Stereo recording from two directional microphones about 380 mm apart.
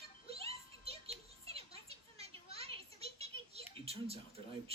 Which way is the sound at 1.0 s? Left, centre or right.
Centre.